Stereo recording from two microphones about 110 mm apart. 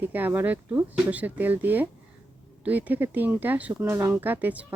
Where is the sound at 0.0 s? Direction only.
15° right (ahead or behind).